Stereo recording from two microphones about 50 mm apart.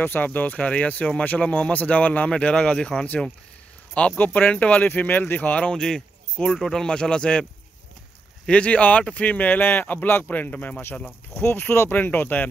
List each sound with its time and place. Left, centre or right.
0.0 s speech: left; by 2.9 s centre
4.2 s speech: left
4.5 s speech: left
5.8 s speech: centre
8.5 s speech: left
11.3 s speech: left